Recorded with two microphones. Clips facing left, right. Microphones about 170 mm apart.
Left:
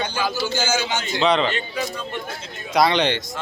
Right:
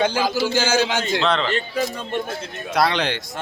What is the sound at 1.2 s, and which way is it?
Speech, centre (ahead or behind).